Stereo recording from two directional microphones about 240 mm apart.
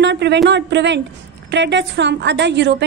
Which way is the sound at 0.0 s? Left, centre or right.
Right.